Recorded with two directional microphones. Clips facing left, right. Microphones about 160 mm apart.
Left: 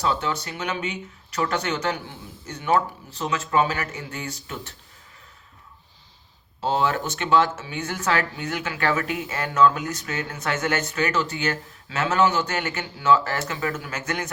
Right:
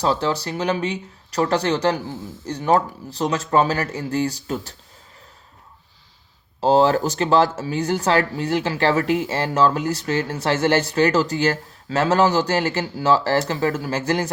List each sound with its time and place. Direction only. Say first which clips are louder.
0.0 s speech: right 4 dB; 35° right (ahead or behind)
6.6 s speech: right 7 dB; 35° right (ahead or behind)